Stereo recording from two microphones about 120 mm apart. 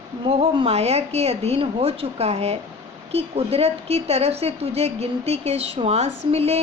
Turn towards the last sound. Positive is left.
turn(degrees=-60)  # may be behind; listen again after turning